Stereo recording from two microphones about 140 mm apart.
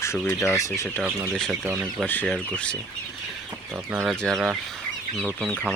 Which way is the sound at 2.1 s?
15° left (ahead or behind).